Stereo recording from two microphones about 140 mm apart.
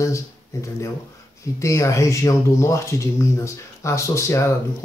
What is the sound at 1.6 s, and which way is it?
Speech, 20° left (ahead or behind).